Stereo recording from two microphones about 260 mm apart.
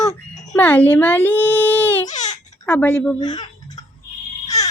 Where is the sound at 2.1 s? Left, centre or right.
Left.